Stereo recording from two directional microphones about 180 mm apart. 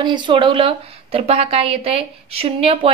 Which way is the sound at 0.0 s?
25° right (ahead or behind).